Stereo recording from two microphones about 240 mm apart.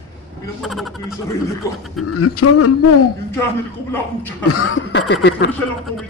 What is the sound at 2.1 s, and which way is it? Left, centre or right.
Speech, left.